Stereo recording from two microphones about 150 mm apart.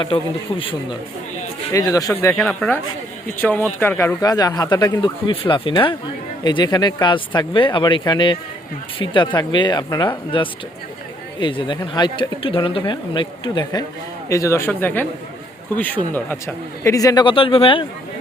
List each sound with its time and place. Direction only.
0.0 s speech: 35° left (ahead or behind)
1.7 s speech: 25° left (ahead or behind)
2.2 s speech: 10° left (ahead or behind); by 13.8 s 30° left (ahead or behind)
14.3 s speech: 20° left (ahead or behind); by 17.8 s 35° left (ahead or behind)